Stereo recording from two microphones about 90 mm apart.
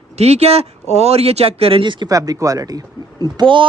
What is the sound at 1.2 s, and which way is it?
Speech, 90° right.